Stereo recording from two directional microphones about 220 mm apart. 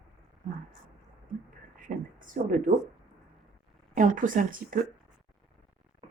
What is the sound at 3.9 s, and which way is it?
Speech, 35° right (ahead or behind).